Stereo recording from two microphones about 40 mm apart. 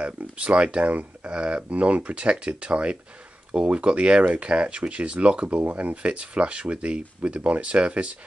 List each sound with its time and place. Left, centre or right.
0.0 s speech: right